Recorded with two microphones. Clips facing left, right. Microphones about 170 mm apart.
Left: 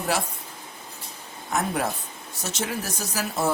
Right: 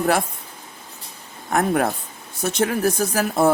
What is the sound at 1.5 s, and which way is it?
Speech, 60° right (ahead or behind).